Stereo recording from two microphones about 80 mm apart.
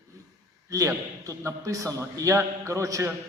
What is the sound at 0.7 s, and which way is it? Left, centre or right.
A man's voice, right.